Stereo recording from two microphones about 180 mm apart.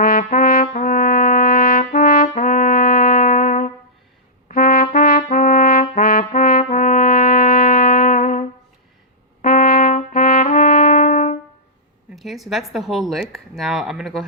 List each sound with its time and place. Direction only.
0.0 s brass instrument: 50° left (ahead or behind)
4.4 s trumpet: 50° left (ahead or behind)
6.6 s brass instrument: 45° left (ahead or behind)
12.1 s speech: centre (ahead or behind)